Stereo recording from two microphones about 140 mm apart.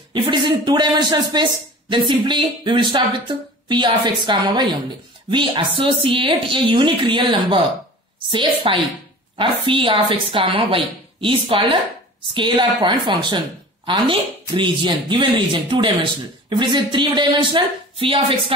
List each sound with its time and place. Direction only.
0.1 s speech: 35° right (ahead or behind)